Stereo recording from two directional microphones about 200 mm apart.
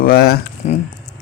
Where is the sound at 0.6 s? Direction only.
35° left (ahead or behind).